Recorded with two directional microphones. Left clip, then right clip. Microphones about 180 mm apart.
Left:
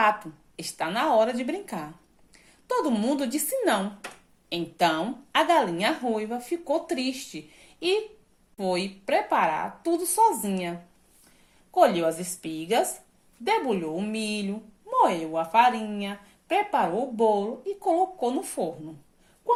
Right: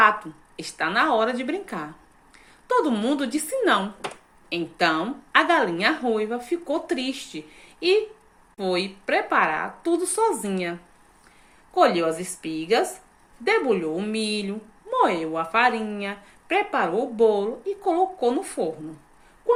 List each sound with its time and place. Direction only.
0.0 s a woman's voice: 40° left (ahead or behind)